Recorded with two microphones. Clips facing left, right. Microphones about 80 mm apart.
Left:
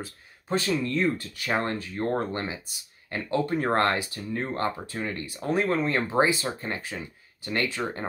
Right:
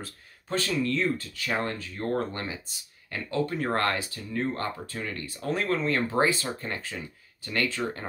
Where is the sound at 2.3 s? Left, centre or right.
Left.